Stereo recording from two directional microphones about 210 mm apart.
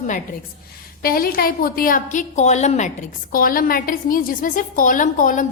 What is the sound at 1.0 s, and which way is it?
A woman's voice, 45° left (ahead or behind).